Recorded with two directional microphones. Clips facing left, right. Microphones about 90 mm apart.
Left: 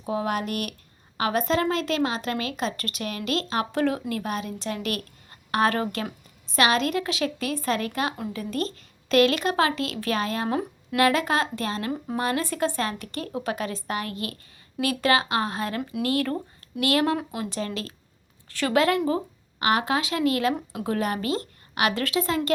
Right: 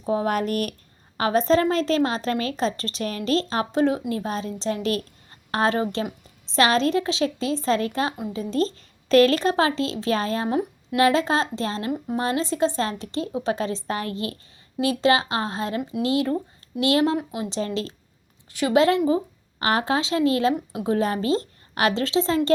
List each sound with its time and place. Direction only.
0.0 s speech: 35° right (ahead or behind)
3.7 s speech: 20° right (ahead or behind)
17.2 s speech: 15° right (ahead or behind)
19.5 s speech: 35° right (ahead or behind)